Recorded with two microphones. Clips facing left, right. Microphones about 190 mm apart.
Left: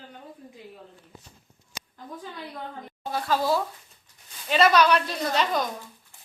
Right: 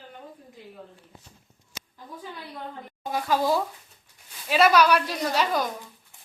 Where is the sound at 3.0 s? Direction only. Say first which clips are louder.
Right 1 dB; 15° right (ahead or behind).